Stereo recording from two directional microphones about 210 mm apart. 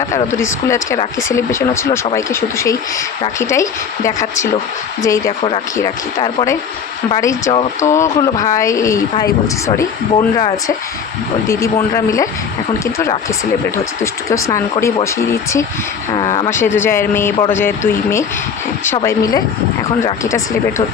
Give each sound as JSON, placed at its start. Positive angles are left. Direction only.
{"t": 0.1, "sound": "speech", "side_deg": 10}
{"t": 7.5, "sound": "speech", "side_deg": 25}
{"t": 7.9, "sound": "speech", "side_deg": 15}